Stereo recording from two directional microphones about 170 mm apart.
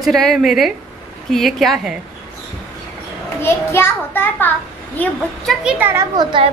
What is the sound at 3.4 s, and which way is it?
A child's voice, 15° left (ahead or behind).